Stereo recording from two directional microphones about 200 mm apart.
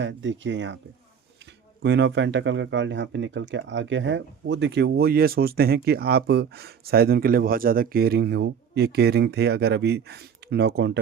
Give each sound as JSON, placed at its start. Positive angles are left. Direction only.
{"t": 0.0, "sound": "speech", "side_deg": -65}
{"t": 1.8, "sound": "speech", "side_deg": -60}